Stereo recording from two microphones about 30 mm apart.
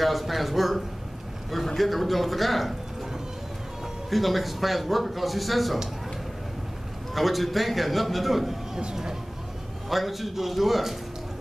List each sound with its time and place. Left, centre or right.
0.0 s a man's voice: centre
4.1 s a man's voice: centre
7.2 s a man's voice: centre
9.8 s a man's voice: centre